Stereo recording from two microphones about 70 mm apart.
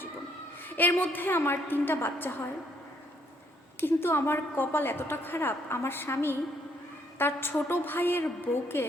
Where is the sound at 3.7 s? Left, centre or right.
Left.